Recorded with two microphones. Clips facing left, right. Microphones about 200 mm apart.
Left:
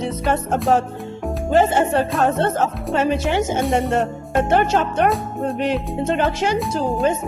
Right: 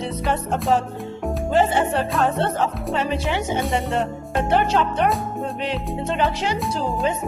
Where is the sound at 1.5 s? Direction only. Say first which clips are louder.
Left 3 dB; 45° left (ahead or behind).